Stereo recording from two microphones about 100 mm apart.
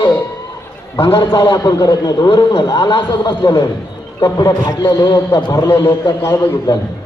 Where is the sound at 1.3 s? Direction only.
50° left (ahead or behind).